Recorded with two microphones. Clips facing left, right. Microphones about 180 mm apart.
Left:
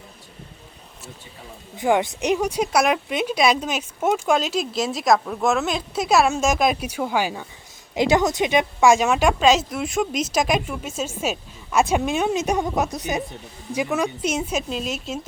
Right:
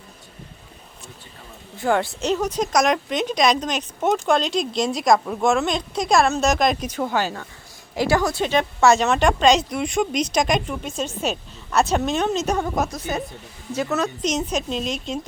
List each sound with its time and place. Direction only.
1.8 s speech: 15° left (ahead or behind)